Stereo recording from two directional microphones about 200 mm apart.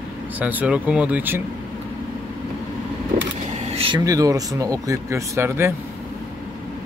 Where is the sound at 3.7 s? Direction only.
25° right (ahead or behind).